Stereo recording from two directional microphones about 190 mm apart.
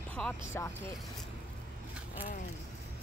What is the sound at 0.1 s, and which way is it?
Speech, 10° left (ahead or behind).